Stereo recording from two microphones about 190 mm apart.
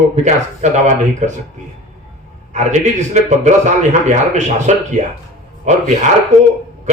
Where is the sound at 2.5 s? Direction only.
35° right (ahead or behind).